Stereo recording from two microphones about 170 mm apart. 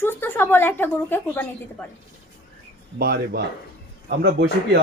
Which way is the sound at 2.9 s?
65° right (ahead or behind).